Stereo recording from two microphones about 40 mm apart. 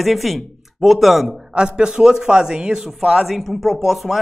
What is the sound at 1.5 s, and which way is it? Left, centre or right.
Speech, right.